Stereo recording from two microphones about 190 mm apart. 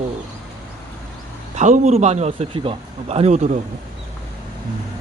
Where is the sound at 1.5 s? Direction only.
40° right (ahead or behind).